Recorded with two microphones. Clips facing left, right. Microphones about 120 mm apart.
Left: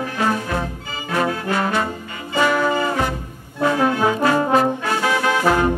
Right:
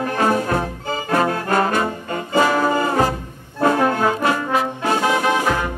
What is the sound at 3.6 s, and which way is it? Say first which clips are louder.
Accordion: right 1 dB; 45° right (ahead or behind).